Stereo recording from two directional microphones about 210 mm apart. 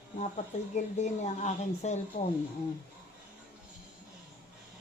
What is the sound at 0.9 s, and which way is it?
Speech, 35° left (ahead or behind).